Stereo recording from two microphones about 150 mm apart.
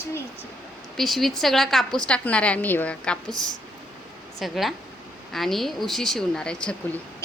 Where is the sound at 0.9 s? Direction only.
Centre (ahead or behind).